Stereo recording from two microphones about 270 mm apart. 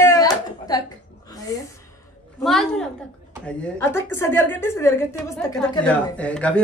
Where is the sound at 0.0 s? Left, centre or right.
Centre.